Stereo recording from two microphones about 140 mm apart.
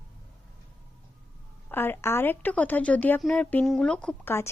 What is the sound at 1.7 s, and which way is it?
Speech, 15° left (ahead or behind).